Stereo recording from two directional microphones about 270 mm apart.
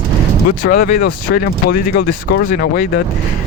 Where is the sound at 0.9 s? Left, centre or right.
Left.